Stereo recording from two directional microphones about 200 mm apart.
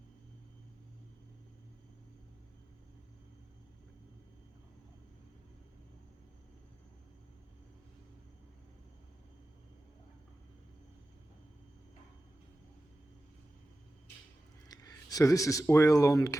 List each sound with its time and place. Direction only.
14.7 s speech: 20° left (ahead or behind)